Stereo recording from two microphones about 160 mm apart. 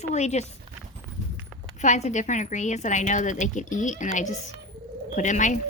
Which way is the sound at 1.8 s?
50° left (ahead or behind).